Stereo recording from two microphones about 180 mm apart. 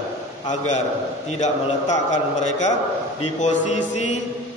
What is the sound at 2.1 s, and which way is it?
A man's voice, 40° left (ahead or behind).